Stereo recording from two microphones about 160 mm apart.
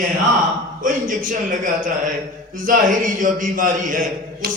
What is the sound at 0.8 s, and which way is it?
Speech, 55° right (ahead or behind).